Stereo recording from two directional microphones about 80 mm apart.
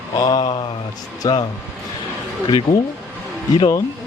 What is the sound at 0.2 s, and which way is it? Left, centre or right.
Mantra, left.